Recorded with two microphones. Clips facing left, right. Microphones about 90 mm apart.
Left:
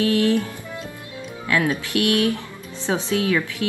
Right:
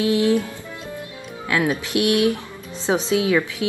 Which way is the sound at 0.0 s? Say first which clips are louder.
Right 1 dB; 20° right (ahead or behind).